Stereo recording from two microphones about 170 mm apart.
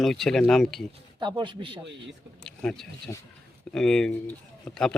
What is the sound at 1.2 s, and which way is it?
Speech, 25° right (ahead or behind).